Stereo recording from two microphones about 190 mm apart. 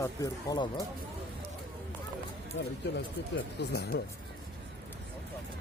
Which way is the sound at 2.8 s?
65° left (ahead or behind).